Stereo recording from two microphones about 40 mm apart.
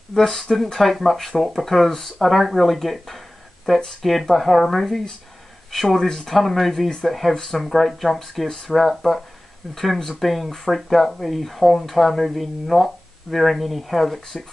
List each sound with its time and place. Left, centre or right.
0.1 s speech: centre
3.7 s speech: centre
4.0 s speech: centre
6.0 s speech: centre